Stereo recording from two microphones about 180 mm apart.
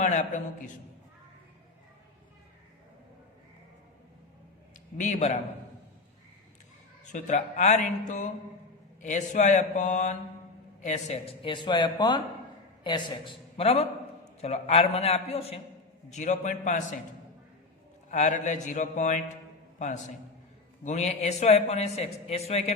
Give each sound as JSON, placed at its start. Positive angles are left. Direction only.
{"t": 0.0, "sound": "a man's voice", "side_deg": 40}
{"t": 4.9, "sound": "a man's voice", "side_deg": 40}
{"t": 7.1, "sound": "a man's voice", "side_deg": 40}
{"t": 18.1, "sound": "speech", "side_deg": 40}
{"t": 20.8, "sound": "a man's voice", "side_deg": 40}